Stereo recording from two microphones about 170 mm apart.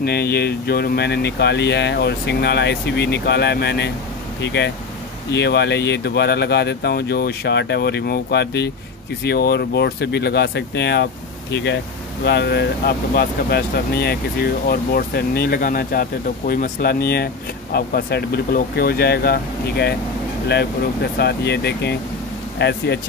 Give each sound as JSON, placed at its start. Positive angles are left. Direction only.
{"t": 0.0, "sound": "speech", "side_deg": 70}
{"t": 4.4, "sound": "speech", "side_deg": 90}
{"t": 5.3, "sound": "speech", "side_deg": 80}
{"t": 12.3, "sound": "speech", "side_deg": 75}